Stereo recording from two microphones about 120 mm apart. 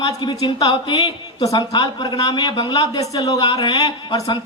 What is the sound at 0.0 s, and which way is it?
A woman's voice, 40° left (ahead or behind).